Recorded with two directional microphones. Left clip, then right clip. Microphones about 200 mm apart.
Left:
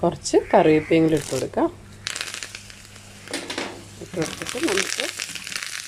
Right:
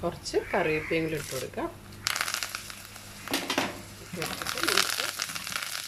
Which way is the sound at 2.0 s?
Centre (ahead or behind).